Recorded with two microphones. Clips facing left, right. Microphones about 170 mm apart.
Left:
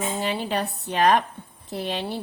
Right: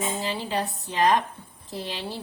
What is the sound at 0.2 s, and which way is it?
A woman's voice, 65° left (ahead or behind).